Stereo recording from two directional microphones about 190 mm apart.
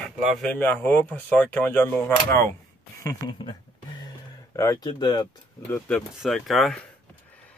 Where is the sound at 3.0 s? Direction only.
20° left (ahead or behind).